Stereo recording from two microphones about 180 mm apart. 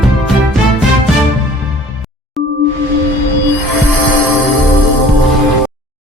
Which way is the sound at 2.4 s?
Centre (ahead or behind).